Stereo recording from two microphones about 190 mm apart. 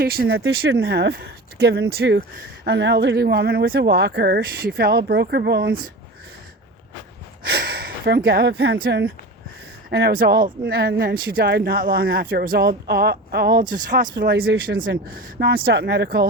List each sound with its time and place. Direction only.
0.0 s speech: 55° right (ahead or behind)
7.4 s speech: 55° right (ahead or behind)